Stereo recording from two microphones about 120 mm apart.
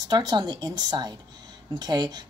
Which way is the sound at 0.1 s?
35° right (ahead or behind).